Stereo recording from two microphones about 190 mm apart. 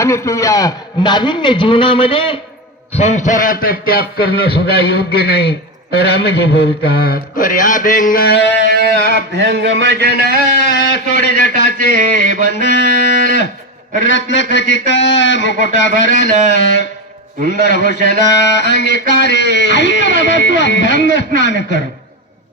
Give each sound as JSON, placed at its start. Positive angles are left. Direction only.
{"t": 0.0, "sound": "a man's voice", "side_deg": 15}
{"t": 9.0, "sound": "a man's voice", "side_deg": -65}
{"t": 10.7, "sound": "a man's voice", "side_deg": 60}
{"t": 14.0, "sound": "a man's voice", "side_deg": 75}